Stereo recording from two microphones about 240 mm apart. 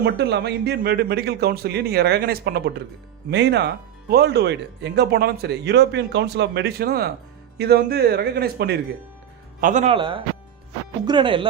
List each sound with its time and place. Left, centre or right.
0.0 s a man's voice: right